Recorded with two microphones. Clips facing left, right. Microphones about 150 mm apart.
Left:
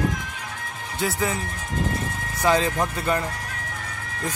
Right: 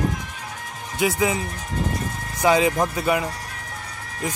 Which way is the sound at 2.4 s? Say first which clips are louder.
Right 3 dB; 15° right (ahead or behind).